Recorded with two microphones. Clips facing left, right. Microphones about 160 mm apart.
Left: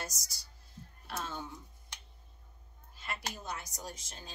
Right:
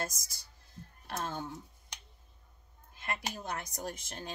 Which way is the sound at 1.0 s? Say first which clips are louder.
Right 3 dB; 50° right (ahead or behind).